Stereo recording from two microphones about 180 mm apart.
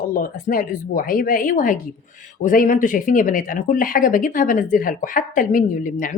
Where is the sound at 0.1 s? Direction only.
50° left (ahead or behind).